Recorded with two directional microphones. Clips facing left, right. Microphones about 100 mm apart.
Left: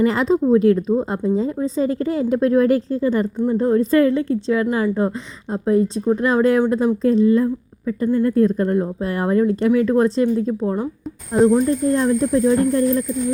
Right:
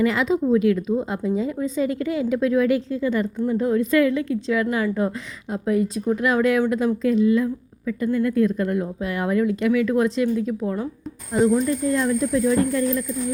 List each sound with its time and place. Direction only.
0.0 s speech: 35° left (ahead or behind)
11.9 s speech: 35° left (ahead or behind)